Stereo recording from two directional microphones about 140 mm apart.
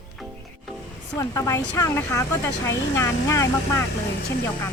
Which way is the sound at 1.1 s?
20° left (ahead or behind).